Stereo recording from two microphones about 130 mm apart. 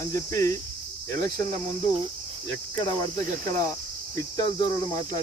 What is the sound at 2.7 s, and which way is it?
Speech, 30° left (ahead or behind).